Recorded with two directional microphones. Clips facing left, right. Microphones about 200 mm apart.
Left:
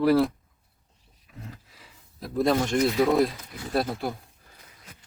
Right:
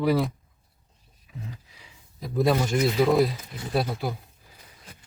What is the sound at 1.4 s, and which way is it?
Speech, centre (ahead or behind).